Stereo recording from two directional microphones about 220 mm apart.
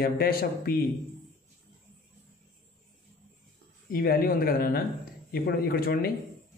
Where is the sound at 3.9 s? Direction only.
40° left (ahead or behind).